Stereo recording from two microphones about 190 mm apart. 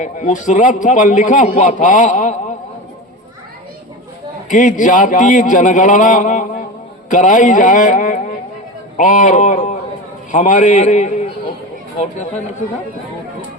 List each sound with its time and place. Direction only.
0.0 s a man's voice: 40° left (ahead or behind)
4.4 s a man's voice: 45° left (ahead or behind)